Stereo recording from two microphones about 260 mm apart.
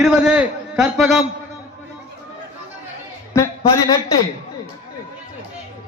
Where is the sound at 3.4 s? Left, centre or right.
Centre.